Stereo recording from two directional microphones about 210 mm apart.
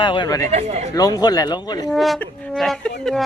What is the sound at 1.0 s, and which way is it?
Speech, 15° left (ahead or behind).